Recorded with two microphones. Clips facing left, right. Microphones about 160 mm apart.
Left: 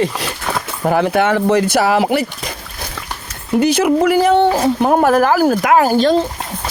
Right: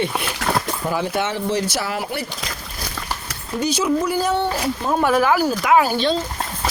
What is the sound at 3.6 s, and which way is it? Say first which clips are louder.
Speech: left 6 dB; 60° left (ahead or behind).